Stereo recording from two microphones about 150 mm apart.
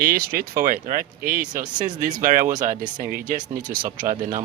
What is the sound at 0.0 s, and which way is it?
Speech, 70° right (ahead or behind).